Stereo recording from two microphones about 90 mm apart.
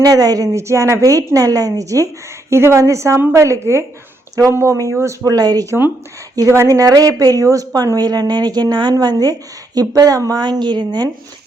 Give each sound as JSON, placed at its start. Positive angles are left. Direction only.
{"t": 0.0, "sound": "a woman's voice", "side_deg": -45}
{"t": 6.5, "sound": "a woman's voice", "side_deg": -35}